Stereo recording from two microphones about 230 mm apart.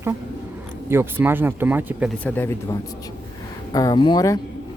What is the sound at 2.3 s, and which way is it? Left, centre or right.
Speech, centre.